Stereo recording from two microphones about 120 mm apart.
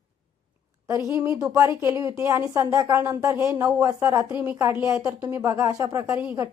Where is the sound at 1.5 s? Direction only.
25° right (ahead or behind).